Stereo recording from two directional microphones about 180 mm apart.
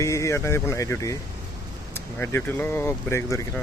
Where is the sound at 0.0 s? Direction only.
15° left (ahead or behind).